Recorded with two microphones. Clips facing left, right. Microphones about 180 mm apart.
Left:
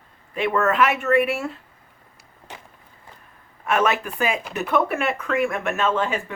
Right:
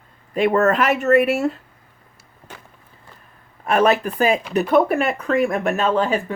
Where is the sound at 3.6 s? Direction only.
35° right (ahead or behind).